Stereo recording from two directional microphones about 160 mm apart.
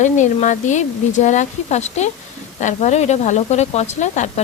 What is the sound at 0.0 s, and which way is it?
Speech, 50° left (ahead or behind).